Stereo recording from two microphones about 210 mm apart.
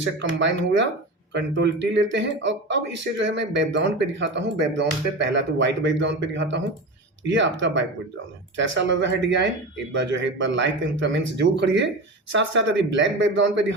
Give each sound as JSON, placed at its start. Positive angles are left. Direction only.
{"t": 0.0, "sound": "speech", "side_deg": -60}